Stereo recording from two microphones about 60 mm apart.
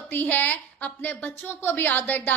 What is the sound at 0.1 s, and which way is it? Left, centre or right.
A woman's voice, left.